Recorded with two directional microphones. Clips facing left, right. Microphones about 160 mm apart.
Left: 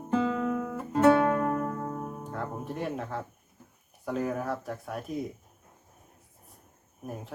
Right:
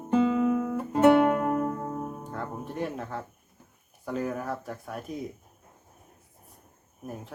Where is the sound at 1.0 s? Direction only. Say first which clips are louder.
Right 2 dB; 20° right (ahead or behind).